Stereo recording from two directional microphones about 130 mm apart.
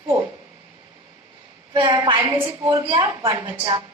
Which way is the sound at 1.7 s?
35° right (ahead or behind).